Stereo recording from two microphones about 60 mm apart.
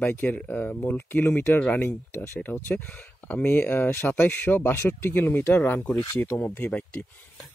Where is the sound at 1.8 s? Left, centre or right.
Left.